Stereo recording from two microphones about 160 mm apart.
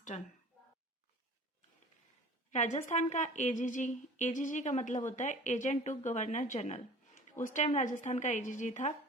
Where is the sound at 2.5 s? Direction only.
45° left (ahead or behind).